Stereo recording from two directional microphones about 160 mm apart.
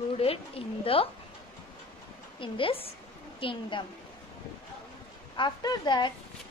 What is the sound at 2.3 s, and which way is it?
A woman's voice, 35° left (ahead or behind).